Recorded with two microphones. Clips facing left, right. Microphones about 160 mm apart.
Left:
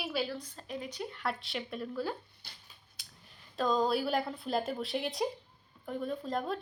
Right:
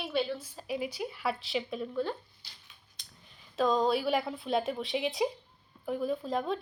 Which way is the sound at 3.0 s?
5° left (ahead or behind).